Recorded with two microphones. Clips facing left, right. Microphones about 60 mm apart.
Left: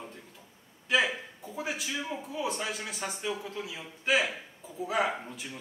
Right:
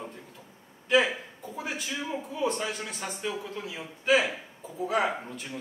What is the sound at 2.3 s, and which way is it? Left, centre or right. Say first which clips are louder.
Speech: right 4 dB; centre.